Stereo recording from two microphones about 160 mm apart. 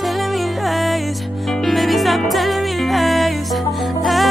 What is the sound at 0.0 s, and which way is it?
Music, centre (ahead or behind).